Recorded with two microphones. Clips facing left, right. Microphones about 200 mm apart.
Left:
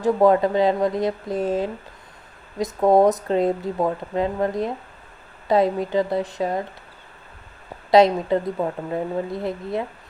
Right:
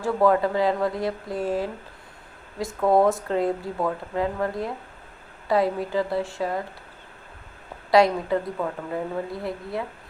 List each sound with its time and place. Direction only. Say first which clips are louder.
0.0 s speech: left 4 dB; 20° left (ahead or behind)
7.9 s speech: left 3 dB; 20° left (ahead or behind)